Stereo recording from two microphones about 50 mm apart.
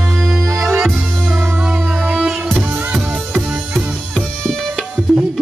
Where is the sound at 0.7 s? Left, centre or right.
Centre.